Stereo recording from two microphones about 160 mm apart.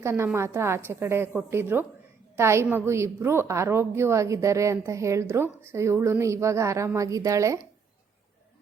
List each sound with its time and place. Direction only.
0.0 s a woman's voice: 15° right (ahead or behind)